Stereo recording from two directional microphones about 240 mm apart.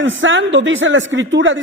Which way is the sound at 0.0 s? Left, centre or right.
Right.